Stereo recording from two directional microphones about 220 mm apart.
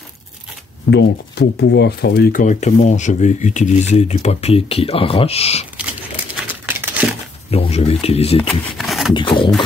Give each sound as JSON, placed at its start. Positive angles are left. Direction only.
{"t": 0.8, "sound": "speech", "side_deg": 50}
{"t": 6.4, "sound": "crumpling", "side_deg": -10}
{"t": 7.5, "sound": "speech", "side_deg": 25}
{"t": 8.4, "sound": "speech", "side_deg": 0}
{"t": 9.1, "sound": "speech", "side_deg": 20}